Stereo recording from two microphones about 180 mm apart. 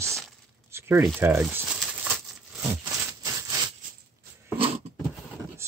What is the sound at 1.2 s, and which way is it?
Speech, 10° right (ahead or behind).